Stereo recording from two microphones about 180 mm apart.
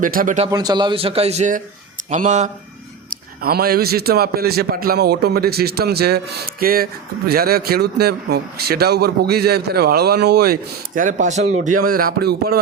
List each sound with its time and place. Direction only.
0.0 s a man's voice: 50° right (ahead or behind)
0.4 s a man's voice: 20° right (ahead or behind); by 2.5 s 45° right (ahead or behind)
3.4 s a man's voice: 60° right (ahead or behind)